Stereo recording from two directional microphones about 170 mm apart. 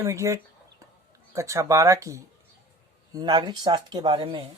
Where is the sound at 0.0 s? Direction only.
15° right (ahead or behind); by 4.4 s 35° right (ahead or behind).